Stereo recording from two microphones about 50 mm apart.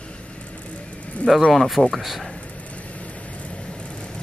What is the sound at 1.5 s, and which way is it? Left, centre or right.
Speech, centre.